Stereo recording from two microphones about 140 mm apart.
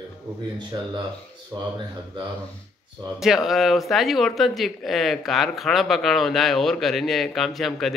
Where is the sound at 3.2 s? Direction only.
Centre (ahead or behind).